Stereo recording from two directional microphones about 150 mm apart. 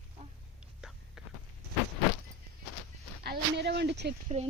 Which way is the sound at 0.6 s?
5° right (ahead or behind).